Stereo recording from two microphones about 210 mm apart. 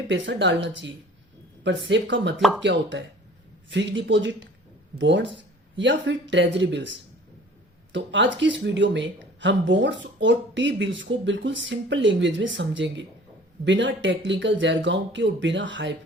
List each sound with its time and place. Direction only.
0.1 s speech: 55° right (ahead or behind)